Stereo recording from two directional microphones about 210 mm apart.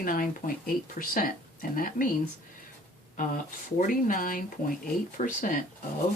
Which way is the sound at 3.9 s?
40° left (ahead or behind).